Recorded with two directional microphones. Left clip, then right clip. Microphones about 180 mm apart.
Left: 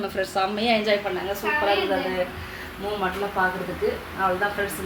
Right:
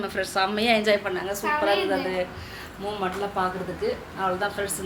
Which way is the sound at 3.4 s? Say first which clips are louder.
Left 3 dB; 10° left (ahead or behind).